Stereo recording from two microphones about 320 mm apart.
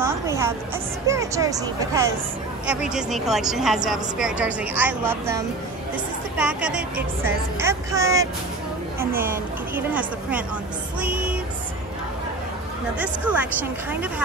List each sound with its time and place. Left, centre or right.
1.0 s a woman's voice: centre
9.8 s speech: centre
11.0 s music: centre
13.0 s speech: centre